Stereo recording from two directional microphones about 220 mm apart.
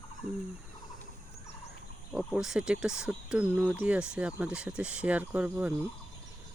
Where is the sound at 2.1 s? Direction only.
5° right (ahead or behind).